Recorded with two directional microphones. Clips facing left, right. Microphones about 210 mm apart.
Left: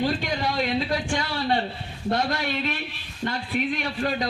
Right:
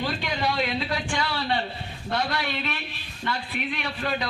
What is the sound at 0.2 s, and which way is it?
A man's voice, 40° left (ahead or behind).